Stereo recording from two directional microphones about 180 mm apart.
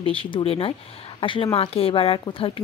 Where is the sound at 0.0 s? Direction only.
30° left (ahead or behind).